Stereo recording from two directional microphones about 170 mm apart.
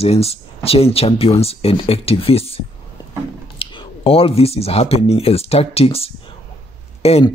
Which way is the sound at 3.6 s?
30° left (ahead or behind).